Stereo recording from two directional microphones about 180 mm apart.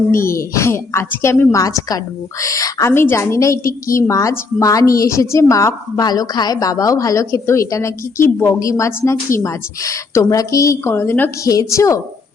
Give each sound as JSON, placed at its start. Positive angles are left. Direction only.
{"t": 0.1, "sound": "a woman's voice", "side_deg": 15}